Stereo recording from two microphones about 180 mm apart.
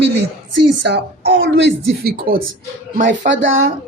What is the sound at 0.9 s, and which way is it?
Speech, 70° right (ahead or behind).